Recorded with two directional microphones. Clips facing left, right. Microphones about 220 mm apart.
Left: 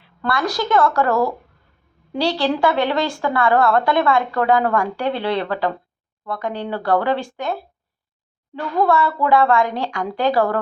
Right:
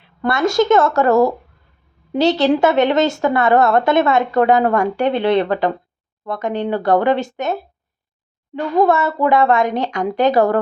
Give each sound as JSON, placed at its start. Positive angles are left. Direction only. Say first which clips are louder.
{"t": 0.0, "sound": "a woman's voice", "louder": "right 5 dB", "side_deg": -20}